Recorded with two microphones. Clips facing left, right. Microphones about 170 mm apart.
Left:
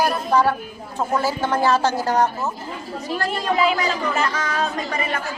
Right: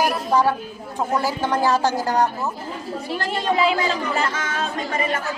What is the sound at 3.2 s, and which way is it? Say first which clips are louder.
Speech: even; 25° right (ahead or behind).